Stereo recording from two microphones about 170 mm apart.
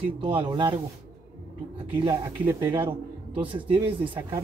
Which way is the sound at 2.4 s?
10° right (ahead or behind).